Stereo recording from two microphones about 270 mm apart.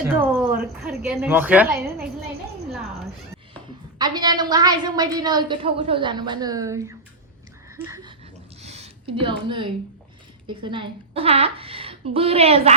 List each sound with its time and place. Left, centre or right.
0.2 s a woman's voice: centre
3.9 s a woman's voice: centre
8.6 s a sound: right
10.5 s a woman's voice: centre